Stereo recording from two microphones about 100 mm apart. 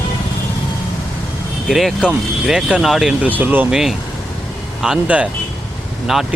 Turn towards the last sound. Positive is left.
turn(degrees=0)  # may be behind; listen again after turning